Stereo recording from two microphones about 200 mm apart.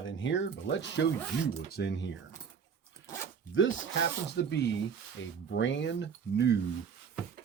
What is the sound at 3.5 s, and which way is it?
Speech, 70° left (ahead or behind).